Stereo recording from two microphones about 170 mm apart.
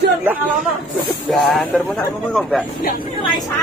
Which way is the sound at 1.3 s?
Centre (ahead or behind).